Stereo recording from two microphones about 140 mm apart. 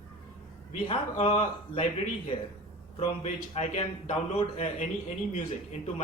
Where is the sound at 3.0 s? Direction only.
50° left (ahead or behind).